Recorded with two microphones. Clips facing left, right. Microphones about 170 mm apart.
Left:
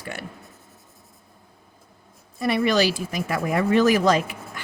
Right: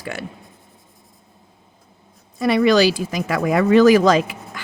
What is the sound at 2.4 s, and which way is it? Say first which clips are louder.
Speech: right 6 dB; 90° right.